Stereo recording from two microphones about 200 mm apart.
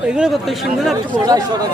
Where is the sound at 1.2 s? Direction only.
20° right (ahead or behind).